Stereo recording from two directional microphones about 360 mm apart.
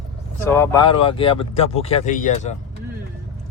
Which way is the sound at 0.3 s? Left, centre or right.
Centre.